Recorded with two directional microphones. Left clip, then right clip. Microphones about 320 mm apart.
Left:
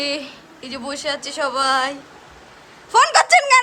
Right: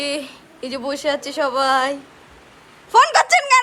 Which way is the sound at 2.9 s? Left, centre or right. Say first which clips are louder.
Even; centre.